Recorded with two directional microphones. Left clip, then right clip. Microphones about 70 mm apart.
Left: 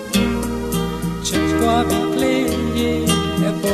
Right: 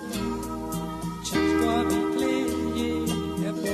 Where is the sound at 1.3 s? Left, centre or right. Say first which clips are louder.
Left 6 dB; right.